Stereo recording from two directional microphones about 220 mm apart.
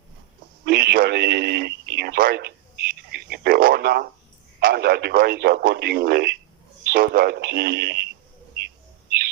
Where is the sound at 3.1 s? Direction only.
45° right (ahead or behind).